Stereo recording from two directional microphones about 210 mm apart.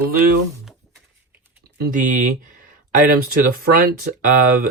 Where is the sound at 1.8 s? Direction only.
40° right (ahead or behind).